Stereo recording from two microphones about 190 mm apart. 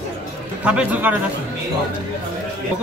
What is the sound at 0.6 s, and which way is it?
Speech, 10° right (ahead or behind).